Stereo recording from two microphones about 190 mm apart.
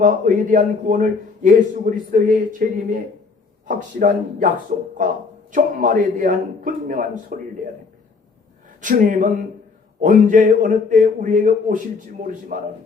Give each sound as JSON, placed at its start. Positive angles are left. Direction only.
{"t": 0.0, "sound": "a man's voice", "side_deg": -45}
{"t": 8.8, "sound": "a man's voice", "side_deg": -45}